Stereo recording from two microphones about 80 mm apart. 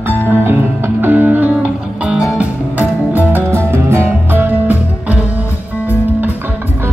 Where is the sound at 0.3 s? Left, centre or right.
Right; by 2.4 s centre.